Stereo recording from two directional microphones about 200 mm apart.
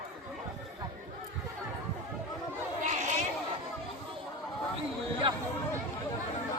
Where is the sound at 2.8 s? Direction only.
35° right (ahead or behind).